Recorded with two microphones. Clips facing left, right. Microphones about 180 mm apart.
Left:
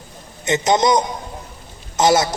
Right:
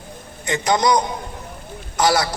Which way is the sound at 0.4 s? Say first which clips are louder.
Left 2 dB; 20° left (ahead or behind).